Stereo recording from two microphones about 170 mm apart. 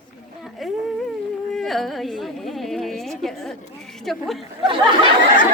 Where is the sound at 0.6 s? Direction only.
Centre (ahead or behind).